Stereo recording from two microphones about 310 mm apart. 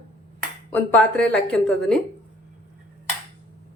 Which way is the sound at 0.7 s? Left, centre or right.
Centre.